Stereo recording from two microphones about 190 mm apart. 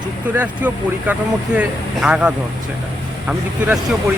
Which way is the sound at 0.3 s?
10° right (ahead or behind).